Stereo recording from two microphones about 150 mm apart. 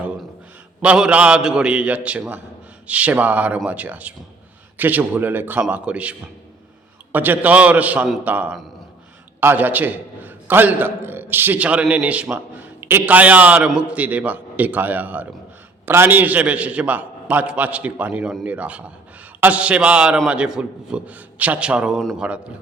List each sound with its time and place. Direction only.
0.8 s a man's voice: 5° right (ahead or behind)